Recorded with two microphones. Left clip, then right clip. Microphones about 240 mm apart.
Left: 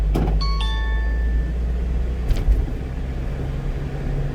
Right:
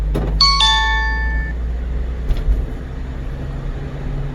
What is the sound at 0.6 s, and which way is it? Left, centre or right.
Music, right.